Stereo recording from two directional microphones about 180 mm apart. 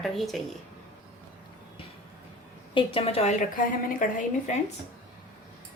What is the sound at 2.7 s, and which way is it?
Speech, 30° left (ahead or behind).